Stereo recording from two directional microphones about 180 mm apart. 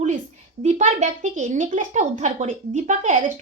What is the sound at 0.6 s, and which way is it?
Speech, 40° right (ahead or behind).